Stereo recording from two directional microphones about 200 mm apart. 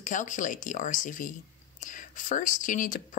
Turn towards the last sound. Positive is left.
turn(degrees=40)  # may be behind; listen again after turning